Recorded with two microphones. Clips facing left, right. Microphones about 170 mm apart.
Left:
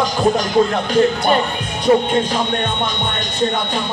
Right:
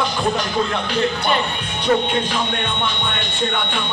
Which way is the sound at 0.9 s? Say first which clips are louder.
Left 6 dB; 45° left (ahead or behind).